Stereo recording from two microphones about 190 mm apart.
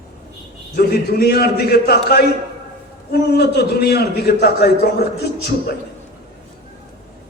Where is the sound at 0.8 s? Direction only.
55° left (ahead or behind).